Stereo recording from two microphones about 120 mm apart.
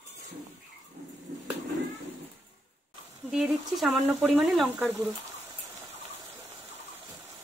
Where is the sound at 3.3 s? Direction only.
5° right (ahead or behind).